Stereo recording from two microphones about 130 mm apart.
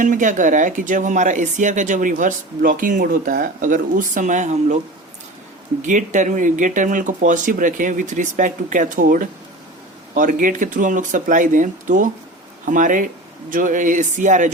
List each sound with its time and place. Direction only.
0.0 s speech: 80° right; by 4.8 s 65° right (ahead or behind)
5.8 s speech: 75° right (ahead or behind)